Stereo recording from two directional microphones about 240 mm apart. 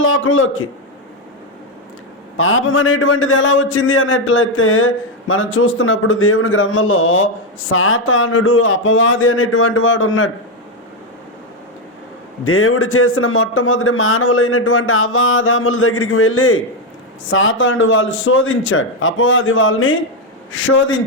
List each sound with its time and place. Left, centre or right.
0.0 s a man's voice: left
2.4 s a man's voice: left
12.5 s a man's voice: left